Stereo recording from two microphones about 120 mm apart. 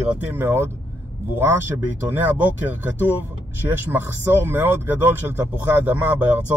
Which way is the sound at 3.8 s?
20° right (ahead or behind).